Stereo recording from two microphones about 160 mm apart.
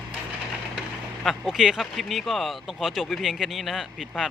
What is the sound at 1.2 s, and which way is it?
Speech, centre (ahead or behind).